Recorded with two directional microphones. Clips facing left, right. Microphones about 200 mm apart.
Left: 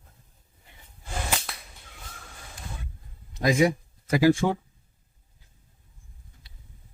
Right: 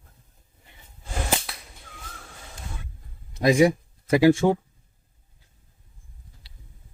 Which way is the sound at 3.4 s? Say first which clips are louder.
Right 4 dB; 25° right (ahead or behind).